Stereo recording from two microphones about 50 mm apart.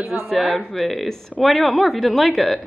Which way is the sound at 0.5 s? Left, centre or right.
Centre.